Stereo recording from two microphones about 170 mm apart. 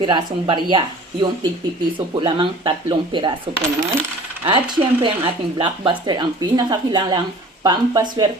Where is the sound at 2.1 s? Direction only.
25° right (ahead or behind).